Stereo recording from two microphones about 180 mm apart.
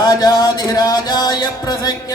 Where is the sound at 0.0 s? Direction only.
20° left (ahead or behind).